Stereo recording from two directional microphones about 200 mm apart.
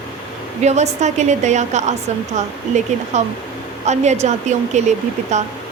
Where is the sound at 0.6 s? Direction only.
35° right (ahead or behind).